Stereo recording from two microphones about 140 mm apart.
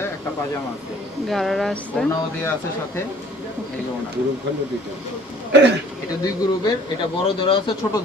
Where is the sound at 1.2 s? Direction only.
Centre (ahead or behind).